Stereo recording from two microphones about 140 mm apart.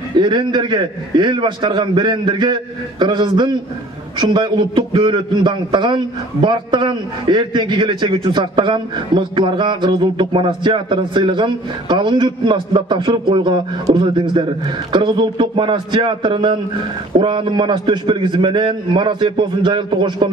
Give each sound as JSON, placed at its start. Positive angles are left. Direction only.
{"t": 0.2, "sound": "a man's voice", "side_deg": -35}